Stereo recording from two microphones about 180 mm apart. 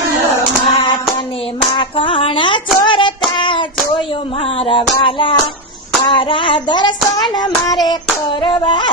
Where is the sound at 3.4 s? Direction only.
25° left (ahead or behind).